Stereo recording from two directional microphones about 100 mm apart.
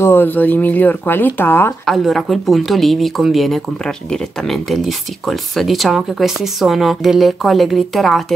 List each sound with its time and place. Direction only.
0.0 s speech: 20° left (ahead or behind)
1.9 s a woman's voice: centre (ahead or behind)